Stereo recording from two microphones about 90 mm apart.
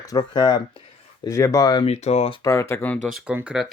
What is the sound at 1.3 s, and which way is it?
Speech, 35° left (ahead or behind).